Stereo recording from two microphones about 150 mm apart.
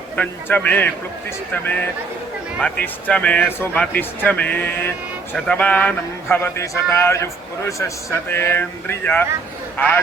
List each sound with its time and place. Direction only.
0.2 s speech: 10° left (ahead or behind)